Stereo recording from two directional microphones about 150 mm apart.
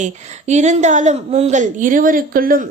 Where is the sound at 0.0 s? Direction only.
50° right (ahead or behind).